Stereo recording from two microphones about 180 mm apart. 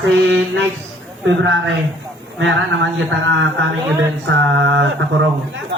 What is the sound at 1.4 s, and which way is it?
A man's voice, 90° right.